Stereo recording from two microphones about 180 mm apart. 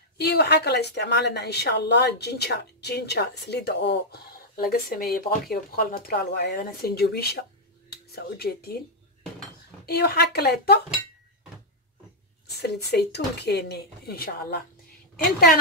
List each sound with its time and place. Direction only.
0.2 s a woman's voice: 65° left (ahead or behind)
9.8 s a woman's voice: 60° left (ahead or behind)
12.5 s a woman's voice: 65° left (ahead or behind)